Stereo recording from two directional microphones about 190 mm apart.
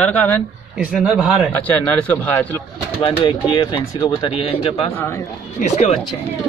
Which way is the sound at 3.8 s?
15° left (ahead or behind).